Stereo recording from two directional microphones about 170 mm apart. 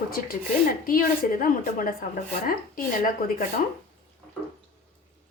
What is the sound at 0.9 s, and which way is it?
A woman's voice, 55° left (ahead or behind).